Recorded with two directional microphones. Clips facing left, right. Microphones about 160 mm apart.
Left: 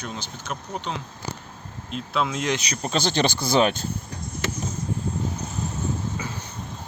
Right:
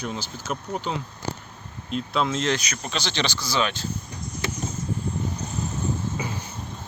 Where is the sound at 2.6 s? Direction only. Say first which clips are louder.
Left 4 dB; 30° left (ahead or behind).